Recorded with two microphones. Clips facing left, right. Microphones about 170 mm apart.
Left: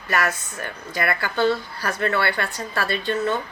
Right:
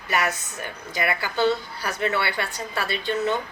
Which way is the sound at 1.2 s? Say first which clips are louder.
Left 1 dB; 55° left (ahead or behind).